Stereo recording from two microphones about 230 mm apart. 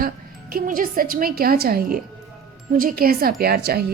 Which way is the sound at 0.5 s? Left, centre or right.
Right.